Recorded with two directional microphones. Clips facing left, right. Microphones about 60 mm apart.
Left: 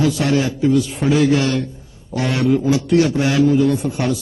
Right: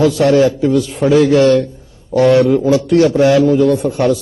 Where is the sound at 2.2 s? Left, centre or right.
Right.